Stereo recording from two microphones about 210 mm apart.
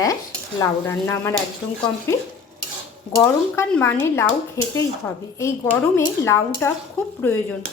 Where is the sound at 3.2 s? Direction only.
10° left (ahead or behind).